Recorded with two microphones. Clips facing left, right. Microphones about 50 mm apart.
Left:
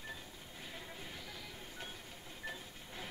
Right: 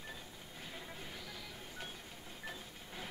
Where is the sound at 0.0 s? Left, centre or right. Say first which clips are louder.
Left 1 dB; centre.